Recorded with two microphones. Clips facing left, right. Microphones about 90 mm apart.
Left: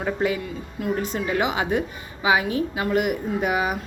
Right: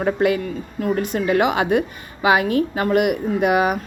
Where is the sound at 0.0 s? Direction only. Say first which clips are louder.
Right 5 dB; 65° right (ahead or behind).